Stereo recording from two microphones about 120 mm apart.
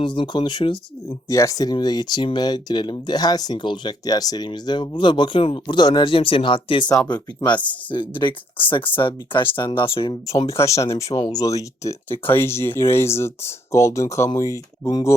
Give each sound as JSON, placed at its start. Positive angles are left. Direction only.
{"t": 0.0, "sound": "speech", "side_deg": 40}
{"t": 1.3, "sound": "speech", "side_deg": 25}
{"t": 10.6, "sound": "speech", "side_deg": 25}